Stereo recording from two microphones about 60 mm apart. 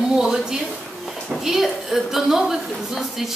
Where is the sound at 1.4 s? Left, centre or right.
Centre.